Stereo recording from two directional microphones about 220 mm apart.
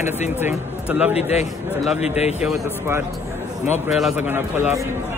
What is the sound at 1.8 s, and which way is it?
A man's voice, centre (ahead or behind).